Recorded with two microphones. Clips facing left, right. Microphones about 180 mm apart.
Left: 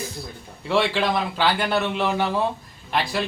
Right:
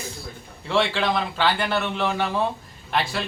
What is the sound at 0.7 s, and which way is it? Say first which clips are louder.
A man's voice: left 1 dB; 5° left (ahead or behind).